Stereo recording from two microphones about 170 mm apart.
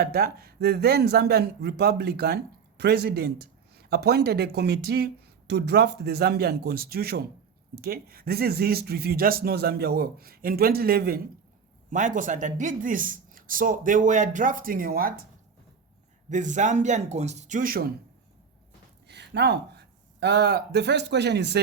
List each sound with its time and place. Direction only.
0.0 s speech: 65° right (ahead or behind)
11.9 s speech: 50° right (ahead or behind)
16.3 s speech: 45° right (ahead or behind)
19.0 s speech: 85° right